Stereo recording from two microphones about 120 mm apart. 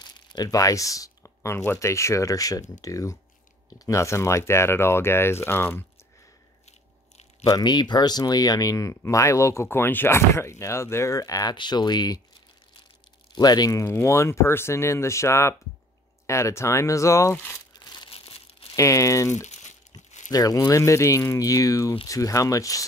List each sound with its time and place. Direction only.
0.0 s speech: 35° left (ahead or behind); by 5.9 s 20° left (ahead or behind)
7.4 s speech: 35° left (ahead or behind)
13.3 s speech: 35° left (ahead or behind)
17.7 s crumpling: 35° left (ahead or behind)
18.1 s tearing: 55° left (ahead or behind)
18.8 s speech: 25° left (ahead or behind)
19.3 s crumpling: 80° left
20.2 s speech: 30° left (ahead or behind)